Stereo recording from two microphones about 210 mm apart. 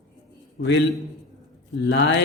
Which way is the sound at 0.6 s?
55° left (ahead or behind).